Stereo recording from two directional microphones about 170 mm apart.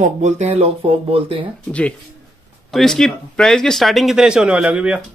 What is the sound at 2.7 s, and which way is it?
Speech, 5° left (ahead or behind).